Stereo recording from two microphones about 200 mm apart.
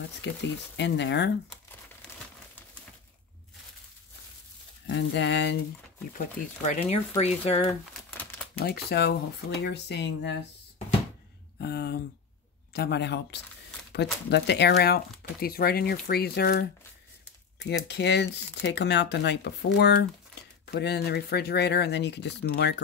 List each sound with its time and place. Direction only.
0.2 s speech: 60° left (ahead or behind)
4.8 s speech: 65° left (ahead or behind)
6.1 s speech: 35° left (ahead or behind)
8.5 s speech: 55° left (ahead or behind)
11.6 s speech: 55° left (ahead or behind)